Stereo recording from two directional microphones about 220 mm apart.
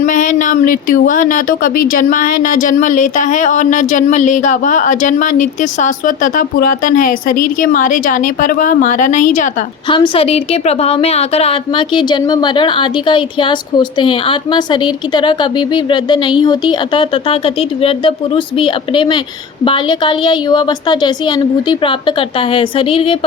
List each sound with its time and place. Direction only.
0.0 s speech: 35° left (ahead or behind)
9.9 s a woman's voice: 25° left (ahead or behind)